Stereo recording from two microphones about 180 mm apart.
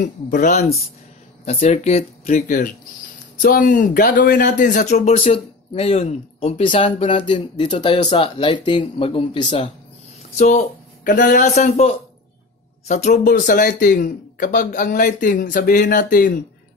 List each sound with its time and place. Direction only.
0.0 s speech: 45° left (ahead or behind)